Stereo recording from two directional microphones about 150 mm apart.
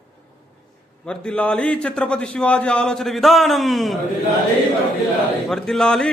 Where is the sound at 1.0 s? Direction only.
5° left (ahead or behind).